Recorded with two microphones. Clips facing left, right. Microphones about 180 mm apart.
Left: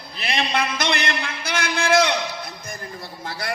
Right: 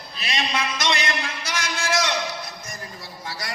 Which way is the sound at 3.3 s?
60° left (ahead or behind).